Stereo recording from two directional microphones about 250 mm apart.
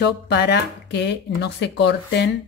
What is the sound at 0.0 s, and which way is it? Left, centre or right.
Speech, left.